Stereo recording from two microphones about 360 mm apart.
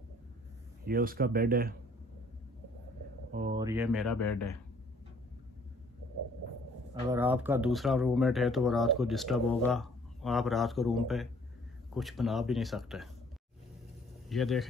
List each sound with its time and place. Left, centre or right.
0.8 s speech: right
3.5 s speech: centre
6.9 s speech: centre
14.3 s speech: centre